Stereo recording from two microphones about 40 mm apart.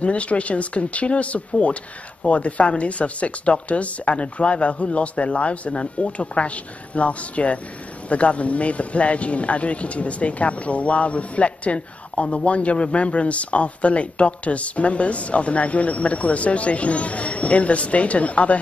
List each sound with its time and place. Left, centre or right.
0.0 s speech: left